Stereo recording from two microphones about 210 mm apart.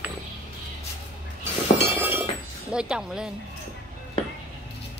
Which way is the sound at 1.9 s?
10° right (ahead or behind).